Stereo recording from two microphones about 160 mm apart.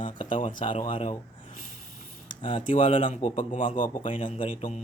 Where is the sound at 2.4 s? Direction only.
35° left (ahead or behind).